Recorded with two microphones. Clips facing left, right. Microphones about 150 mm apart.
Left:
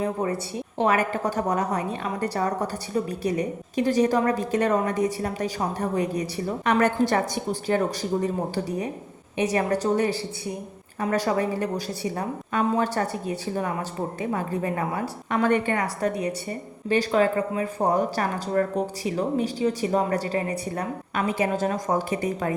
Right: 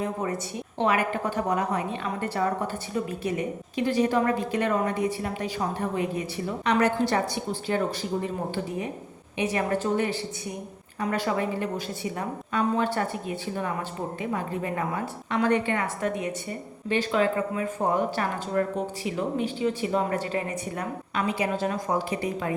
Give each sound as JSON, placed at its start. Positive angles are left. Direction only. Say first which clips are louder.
{"t": 0.0, "sound": "a woman's voice", "louder": "left 3 dB", "side_deg": 30}
{"t": 0.9, "sound": "a woman's voice", "louder": "left 2 dB", "side_deg": 40}
{"t": 12.8, "sound": "a woman's voice", "louder": "left 1 dB", "side_deg": 40}